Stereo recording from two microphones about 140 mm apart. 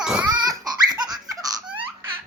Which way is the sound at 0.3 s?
30° right (ahead or behind).